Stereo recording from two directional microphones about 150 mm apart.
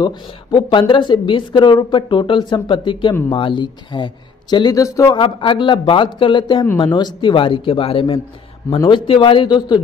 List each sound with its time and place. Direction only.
0.0 s speech: 30° left (ahead or behind)